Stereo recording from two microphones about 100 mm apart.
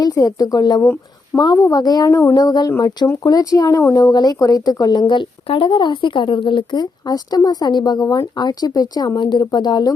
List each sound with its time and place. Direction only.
0.0 s speech: 35° left (ahead or behind)
1.3 s a child's voice: 10° left (ahead or behind)
1.7 s speech: 40° left (ahead or behind)